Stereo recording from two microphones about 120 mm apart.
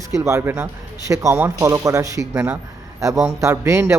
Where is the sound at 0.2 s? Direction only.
20° right (ahead or behind).